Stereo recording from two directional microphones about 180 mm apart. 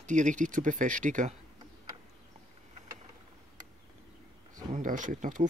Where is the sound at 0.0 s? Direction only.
40° right (ahead or behind).